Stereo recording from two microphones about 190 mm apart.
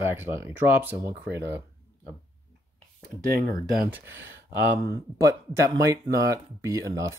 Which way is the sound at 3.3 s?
50° right (ahead or behind).